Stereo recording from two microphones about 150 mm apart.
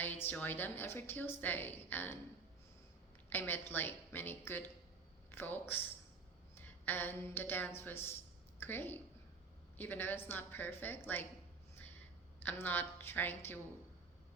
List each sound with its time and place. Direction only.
0.3 s a woman's voice: 10° left (ahead or behind)
3.2 s a woman's voice: 15° left (ahead or behind)
12.4 s a woman's voice: 10° left (ahead or behind)